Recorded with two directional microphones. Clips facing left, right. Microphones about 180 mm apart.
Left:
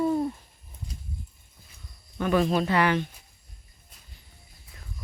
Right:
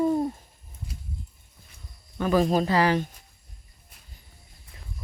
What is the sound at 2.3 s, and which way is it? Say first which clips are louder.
Speech: right 2 dB; 40° right (ahead or behind).